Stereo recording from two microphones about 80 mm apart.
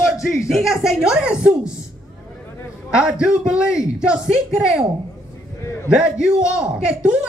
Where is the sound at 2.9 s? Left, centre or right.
Centre.